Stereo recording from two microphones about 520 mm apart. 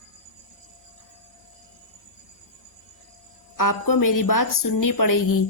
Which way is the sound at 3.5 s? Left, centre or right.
Left.